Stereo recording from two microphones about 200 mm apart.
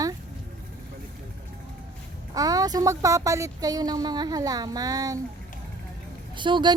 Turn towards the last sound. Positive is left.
turn(degrees=-25)  # may be behind; listen again after turning